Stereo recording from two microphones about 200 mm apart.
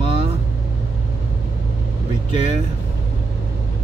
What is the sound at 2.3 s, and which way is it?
Vehicle, 30° right (ahead or behind).